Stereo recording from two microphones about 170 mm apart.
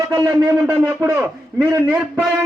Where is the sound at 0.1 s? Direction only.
20° right (ahead or behind).